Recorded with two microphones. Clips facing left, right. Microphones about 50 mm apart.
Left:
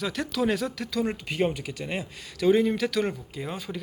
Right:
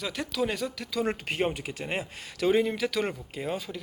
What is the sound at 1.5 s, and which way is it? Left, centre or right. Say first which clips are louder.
Speech: left 1 dB; right.